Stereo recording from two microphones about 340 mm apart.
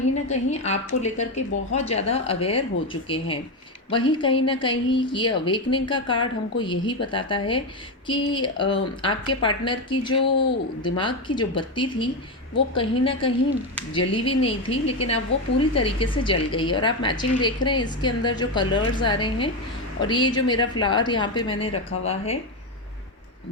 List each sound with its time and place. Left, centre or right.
0.3 s a woman's voice: centre